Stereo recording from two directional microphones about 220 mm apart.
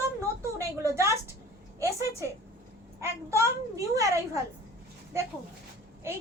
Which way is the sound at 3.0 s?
15° right (ahead or behind).